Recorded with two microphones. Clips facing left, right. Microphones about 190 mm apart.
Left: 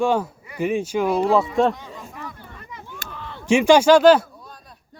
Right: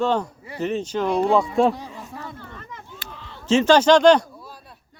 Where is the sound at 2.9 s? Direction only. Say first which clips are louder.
Left 4 dB; 50° left (ahead or behind).